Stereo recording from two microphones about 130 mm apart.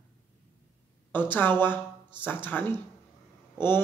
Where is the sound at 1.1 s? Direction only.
15° left (ahead or behind).